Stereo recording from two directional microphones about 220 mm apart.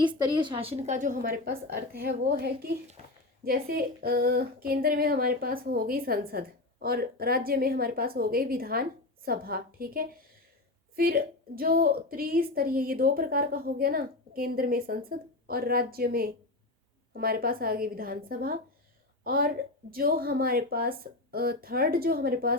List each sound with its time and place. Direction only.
0.0 s a woman's voice: 20° right (ahead or behind); by 2.7 s 45° right (ahead or behind)
3.0 s a woman's voice: 30° right (ahead or behind)
3.4 s a woman's voice: 40° right (ahead or behind)